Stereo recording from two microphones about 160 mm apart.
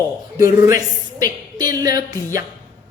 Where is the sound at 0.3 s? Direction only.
20° right (ahead or behind).